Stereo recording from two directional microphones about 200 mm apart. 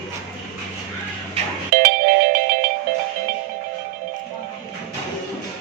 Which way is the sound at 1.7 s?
45° right (ahead or behind).